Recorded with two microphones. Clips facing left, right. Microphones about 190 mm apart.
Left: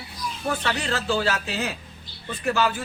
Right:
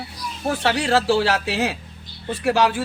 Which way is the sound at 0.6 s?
85° right.